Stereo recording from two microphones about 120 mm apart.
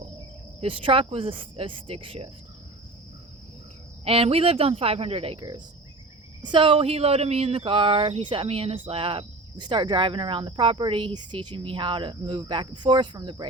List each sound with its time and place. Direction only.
0.6 s speech: 45° right (ahead or behind)
4.0 s speech: 55° right (ahead or behind)